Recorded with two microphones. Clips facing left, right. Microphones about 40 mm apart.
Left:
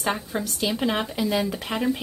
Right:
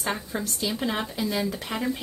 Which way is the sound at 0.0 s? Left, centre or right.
Left.